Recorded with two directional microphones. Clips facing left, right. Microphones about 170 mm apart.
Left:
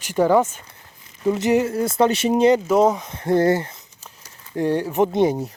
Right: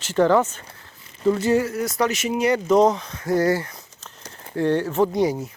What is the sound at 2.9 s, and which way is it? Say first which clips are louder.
Speech: left 3 dB; 25° left (ahead or behind).